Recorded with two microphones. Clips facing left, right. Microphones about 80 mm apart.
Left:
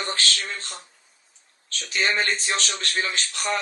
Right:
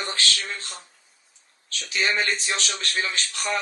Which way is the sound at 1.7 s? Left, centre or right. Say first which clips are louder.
Left 1 dB; left.